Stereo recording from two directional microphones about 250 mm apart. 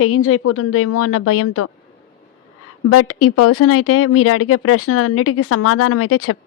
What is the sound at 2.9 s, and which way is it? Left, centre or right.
Speech, left.